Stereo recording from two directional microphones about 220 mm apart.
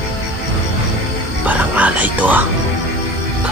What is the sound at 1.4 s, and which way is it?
Music, 5° right (ahead or behind).